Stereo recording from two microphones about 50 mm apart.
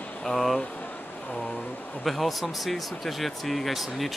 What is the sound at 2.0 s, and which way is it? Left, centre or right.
Speech, centre.